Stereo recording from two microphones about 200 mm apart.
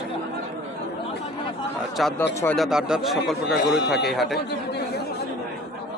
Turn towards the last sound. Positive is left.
turn(degrees=0)  # may be behind; listen again after turning